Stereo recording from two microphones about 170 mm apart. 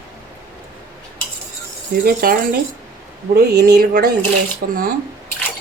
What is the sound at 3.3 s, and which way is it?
Speech, 70° right (ahead or behind).